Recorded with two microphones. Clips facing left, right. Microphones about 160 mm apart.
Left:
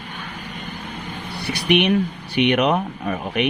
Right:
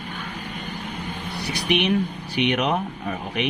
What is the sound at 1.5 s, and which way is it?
Speech, 65° left (ahead or behind).